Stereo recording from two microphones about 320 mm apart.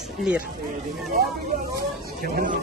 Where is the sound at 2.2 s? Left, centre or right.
Right.